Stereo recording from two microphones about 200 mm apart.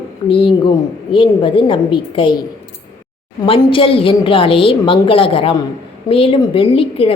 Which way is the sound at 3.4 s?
25° left (ahead or behind).